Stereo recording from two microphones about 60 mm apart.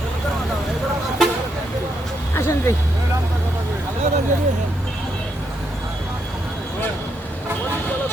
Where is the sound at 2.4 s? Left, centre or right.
Left.